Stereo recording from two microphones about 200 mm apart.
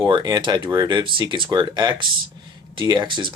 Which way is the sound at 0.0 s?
25° right (ahead or behind).